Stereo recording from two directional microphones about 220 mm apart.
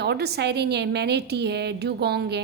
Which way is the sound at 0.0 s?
50° right (ahead or behind).